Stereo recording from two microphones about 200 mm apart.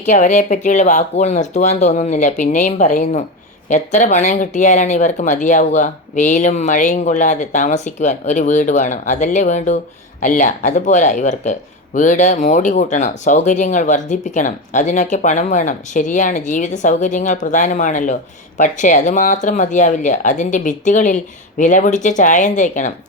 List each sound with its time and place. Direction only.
0.0 s speech: 35° left (ahead or behind)